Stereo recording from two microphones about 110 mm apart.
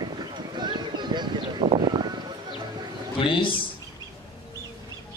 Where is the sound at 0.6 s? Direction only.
45° right (ahead or behind).